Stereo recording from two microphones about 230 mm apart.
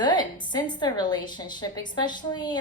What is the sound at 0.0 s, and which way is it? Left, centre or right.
A woman's voice, centre.